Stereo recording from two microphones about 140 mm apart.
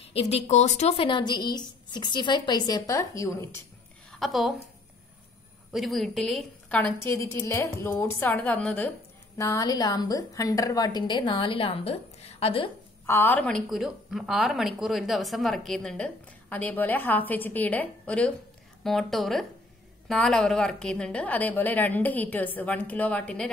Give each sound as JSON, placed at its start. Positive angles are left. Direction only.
{"t": 0.1, "sound": "a woman's voice", "side_deg": 45}
{"t": 4.1, "sound": "a woman's voice", "side_deg": 0}
{"t": 5.7, "sound": "a woman's voice", "side_deg": 0}
{"t": 9.4, "sound": "a woman's voice", "side_deg": 25}
{"t": 13.0, "sound": "a woman's voice", "side_deg": 15}